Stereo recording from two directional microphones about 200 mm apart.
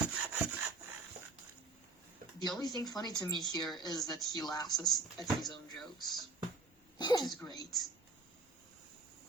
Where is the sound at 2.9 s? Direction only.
20° left (ahead or behind).